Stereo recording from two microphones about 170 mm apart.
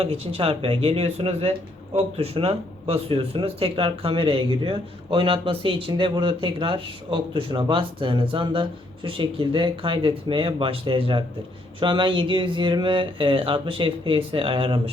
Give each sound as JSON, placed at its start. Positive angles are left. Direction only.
{"t": 0.0, "sound": "speech", "side_deg": -35}